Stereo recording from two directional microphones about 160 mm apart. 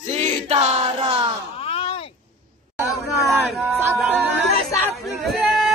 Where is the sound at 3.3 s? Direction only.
Centre (ahead or behind).